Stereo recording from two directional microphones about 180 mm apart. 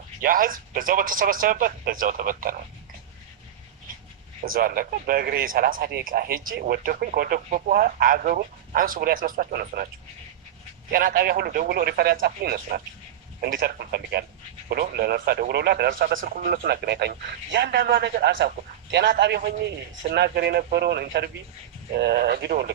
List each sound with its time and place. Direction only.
0.2 s speech: 50° right (ahead or behind)
4.4 s speech: 50° right (ahead or behind)
10.9 s speech: 55° right (ahead or behind)